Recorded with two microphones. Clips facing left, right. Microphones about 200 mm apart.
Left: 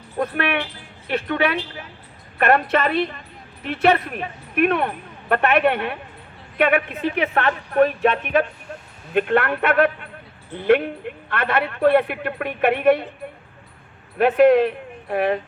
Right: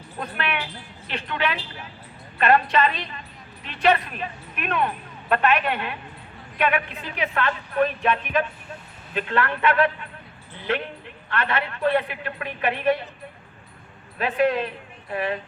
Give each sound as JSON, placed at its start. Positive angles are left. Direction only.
{"t": 0.2, "sound": "a woman's voice", "side_deg": 60}
{"t": 11.3, "sound": "a woman's voice", "side_deg": 60}
{"t": 14.2, "sound": "a woman's voice", "side_deg": 65}